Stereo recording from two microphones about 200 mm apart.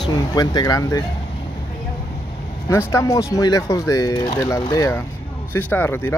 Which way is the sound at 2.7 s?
15° left (ahead or behind).